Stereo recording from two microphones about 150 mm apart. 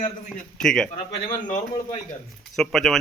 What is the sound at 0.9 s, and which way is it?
Speech, 60° left (ahead or behind).